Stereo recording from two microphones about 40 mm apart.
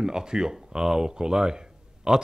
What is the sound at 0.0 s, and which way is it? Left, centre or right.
A man's voice, centre.